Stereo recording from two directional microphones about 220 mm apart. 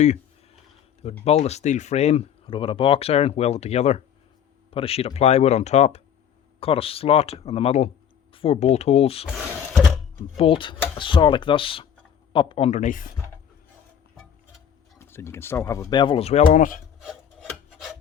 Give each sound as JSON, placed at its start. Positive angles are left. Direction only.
{"t": 1.2, "sound": "speech", "side_deg": 30}
{"t": 10.3, "sound": "speech", "side_deg": 25}
{"t": 14.9, "sound": "speech", "side_deg": 10}
{"t": 17.0, "sound": "rub", "side_deg": 0}